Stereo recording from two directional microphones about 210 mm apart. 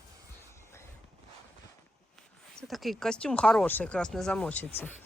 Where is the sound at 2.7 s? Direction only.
Centre (ahead or behind).